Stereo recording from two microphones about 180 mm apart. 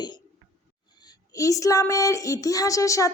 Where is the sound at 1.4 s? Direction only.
20° left (ahead or behind).